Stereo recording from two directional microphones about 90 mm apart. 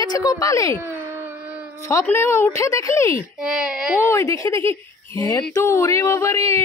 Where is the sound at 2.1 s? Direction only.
30° left (ahead or behind).